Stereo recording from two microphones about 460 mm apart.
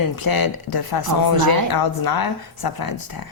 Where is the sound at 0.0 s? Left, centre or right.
Left.